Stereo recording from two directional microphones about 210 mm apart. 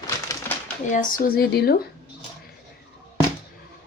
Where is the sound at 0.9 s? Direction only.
40° left (ahead or behind).